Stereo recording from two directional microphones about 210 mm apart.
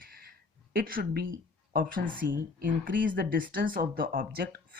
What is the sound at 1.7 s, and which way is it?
Speech, 40° right (ahead or behind).